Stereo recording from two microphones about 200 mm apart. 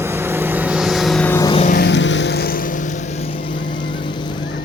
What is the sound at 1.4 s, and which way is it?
Vehicle, 25° left (ahead or behind).